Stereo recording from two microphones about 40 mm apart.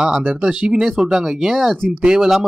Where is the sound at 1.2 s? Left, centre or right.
Centre.